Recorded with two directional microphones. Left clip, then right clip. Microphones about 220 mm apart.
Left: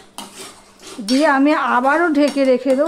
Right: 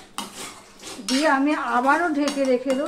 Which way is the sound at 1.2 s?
50° left (ahead or behind).